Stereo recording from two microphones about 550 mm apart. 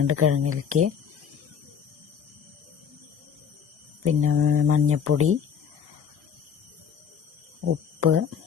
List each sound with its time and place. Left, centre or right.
0.1 s speech: right
4.0 s speech: right
7.6 s speech: right